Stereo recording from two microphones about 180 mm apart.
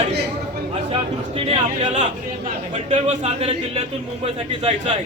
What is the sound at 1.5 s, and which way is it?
Speech, 35° right (ahead or behind).